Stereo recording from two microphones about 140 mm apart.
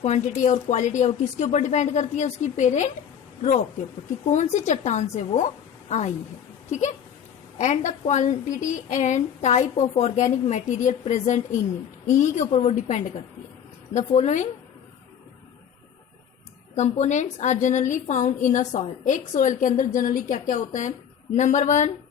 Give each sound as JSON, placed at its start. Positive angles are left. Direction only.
{"t": 0.0, "sound": "a woman's voice", "side_deg": 55}
{"t": 4.3, "sound": "a woman's voice", "side_deg": 55}
{"t": 16.7, "sound": "a woman's voice", "side_deg": 55}